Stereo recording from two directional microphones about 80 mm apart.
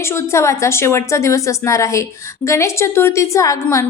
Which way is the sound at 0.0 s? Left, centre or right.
Left.